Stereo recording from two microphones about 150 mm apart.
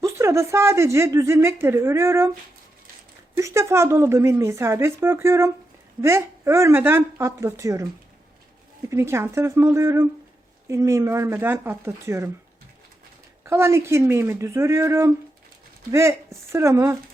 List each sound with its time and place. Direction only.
0.0 s speech: 20° right (ahead or behind)
3.3 s speech: 20° right (ahead or behind)
8.9 s speech: 20° right (ahead or behind)
13.4 s speech: 15° right (ahead or behind)